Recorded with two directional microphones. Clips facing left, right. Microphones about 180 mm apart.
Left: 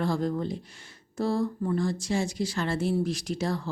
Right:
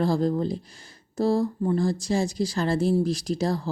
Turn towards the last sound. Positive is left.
turn(degrees=-35)  # may be behind; listen again after turning